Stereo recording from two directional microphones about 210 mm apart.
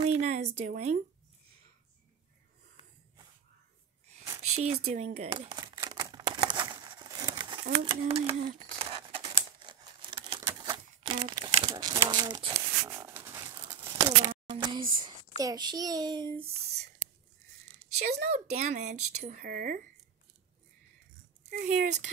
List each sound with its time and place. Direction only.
0.0 s a sound: 30° right (ahead or behind)
4.6 s speech: 30° right (ahead or behind)
5.3 s crumpling: 20° right (ahead or behind)
7.8 s speech: 25° right (ahead or behind)
8.5 s crumpling: 25° right (ahead or behind)
13.7 s a sound: 20° right (ahead or behind)
17.9 s speech: 50° right (ahead or behind)
18.6 s speech: 35° right (ahead or behind)
19.1 s speech: 45° right (ahead or behind)
21.5 s speech: 35° right (ahead or behind)